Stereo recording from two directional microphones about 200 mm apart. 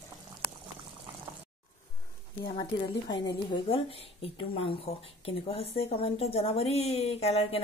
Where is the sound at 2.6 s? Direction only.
20° left (ahead or behind).